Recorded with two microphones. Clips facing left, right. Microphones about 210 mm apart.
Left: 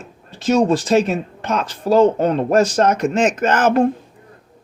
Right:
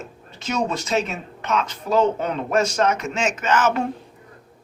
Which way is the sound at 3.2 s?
55° left (ahead or behind).